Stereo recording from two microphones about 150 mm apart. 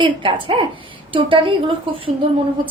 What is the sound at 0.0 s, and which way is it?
A woman's voice, 35° right (ahead or behind).